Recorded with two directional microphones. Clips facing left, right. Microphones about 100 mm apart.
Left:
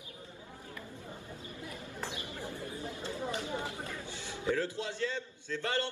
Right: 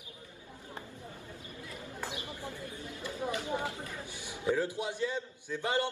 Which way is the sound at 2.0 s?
20° right (ahead or behind).